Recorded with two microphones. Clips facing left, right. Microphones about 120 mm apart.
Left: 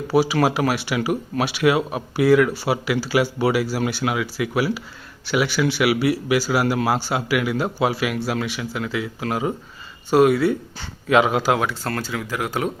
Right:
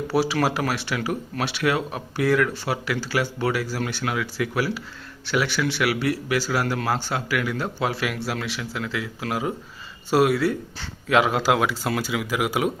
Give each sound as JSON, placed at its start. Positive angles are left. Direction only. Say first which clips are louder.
{"t": 0.1, "sound": "a man's voice", "louder": "left 4 dB", "side_deg": 0}